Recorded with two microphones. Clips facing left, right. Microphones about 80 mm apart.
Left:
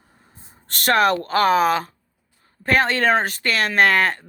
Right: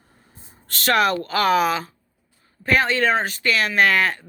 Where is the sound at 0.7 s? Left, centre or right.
Left.